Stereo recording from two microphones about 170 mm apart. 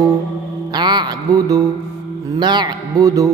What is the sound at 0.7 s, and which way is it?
A woman's voice, 25° right (ahead or behind).